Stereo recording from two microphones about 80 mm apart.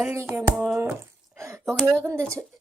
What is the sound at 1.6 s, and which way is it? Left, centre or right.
Speech, centre.